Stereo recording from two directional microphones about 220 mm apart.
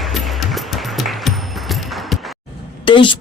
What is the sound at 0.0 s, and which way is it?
Music, centre (ahead or behind).